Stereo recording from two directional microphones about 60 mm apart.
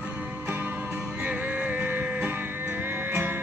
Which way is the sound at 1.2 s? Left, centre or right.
Right.